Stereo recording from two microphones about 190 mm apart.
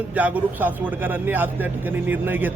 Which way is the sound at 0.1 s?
10° right (ahead or behind).